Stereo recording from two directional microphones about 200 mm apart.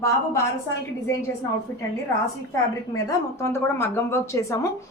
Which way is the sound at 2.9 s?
15° left (ahead or behind).